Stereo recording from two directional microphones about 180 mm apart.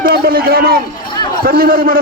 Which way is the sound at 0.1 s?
55° right (ahead or behind).